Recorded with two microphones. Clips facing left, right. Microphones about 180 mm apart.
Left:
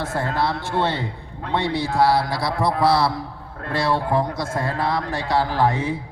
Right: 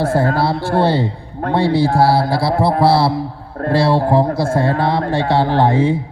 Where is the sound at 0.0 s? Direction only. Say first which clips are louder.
Right 8 dB; 30° right (ahead or behind).